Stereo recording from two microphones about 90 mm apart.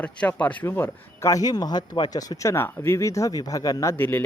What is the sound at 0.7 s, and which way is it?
Speech, 30° left (ahead or behind).